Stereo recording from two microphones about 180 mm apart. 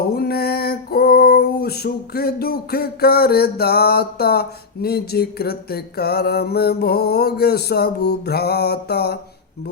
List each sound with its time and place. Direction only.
0.1 s female singing: 60° left (ahead or behind)